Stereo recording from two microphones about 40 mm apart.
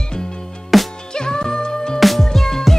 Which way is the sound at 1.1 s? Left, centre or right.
Centre.